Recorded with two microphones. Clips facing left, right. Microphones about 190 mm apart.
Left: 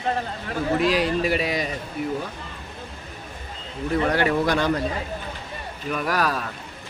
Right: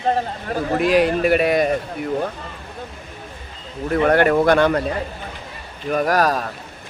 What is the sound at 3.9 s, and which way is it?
Speech, 55° right (ahead or behind).